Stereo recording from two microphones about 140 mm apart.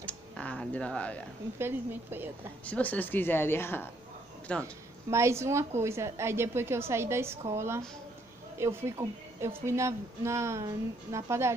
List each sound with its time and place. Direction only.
0.0 s a sound: 10° left (ahead or behind)
1.6 s speech: 15° right (ahead or behind)
2.6 s a woman's voice: 10° left (ahead or behind)
5.1 s a woman's voice: 20° right (ahead or behind)